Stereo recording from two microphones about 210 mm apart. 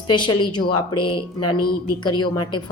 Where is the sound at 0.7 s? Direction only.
90° left.